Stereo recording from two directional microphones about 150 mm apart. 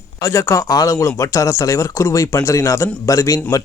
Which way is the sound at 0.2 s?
20° left (ahead or behind).